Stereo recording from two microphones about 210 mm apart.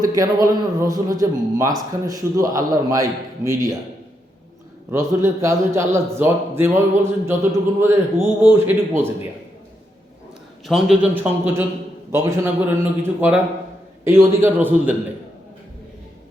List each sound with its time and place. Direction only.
0.2 s a man's voice: 15° right (ahead or behind)
4.9 s a man's voice: 15° right (ahead or behind)
10.7 s a man's voice: centre (ahead or behind)